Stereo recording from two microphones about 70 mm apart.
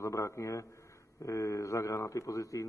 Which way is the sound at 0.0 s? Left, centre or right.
Left.